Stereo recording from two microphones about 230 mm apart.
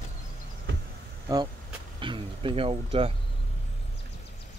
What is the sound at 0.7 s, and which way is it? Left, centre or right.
Vehicle, right.